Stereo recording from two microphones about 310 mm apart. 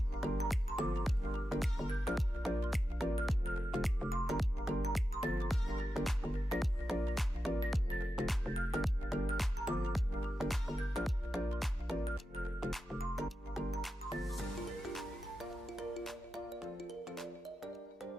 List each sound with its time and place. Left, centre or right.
0.2 s music: centre